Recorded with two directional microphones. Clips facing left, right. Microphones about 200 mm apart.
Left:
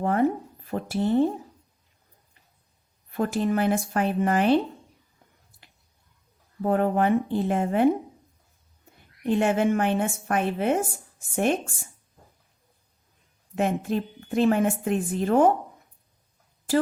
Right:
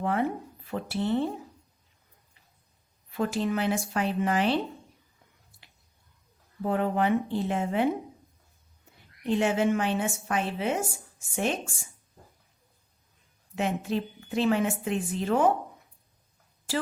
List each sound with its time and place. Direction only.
0.0 s speech: 45° left (ahead or behind)
3.1 s a woman's voice: 50° left (ahead or behind)
6.7 s a woman's voice: 50° left (ahead or behind)
9.2 s a woman's voice: 55° left (ahead or behind)
13.6 s a woman's voice: 50° left (ahead or behind)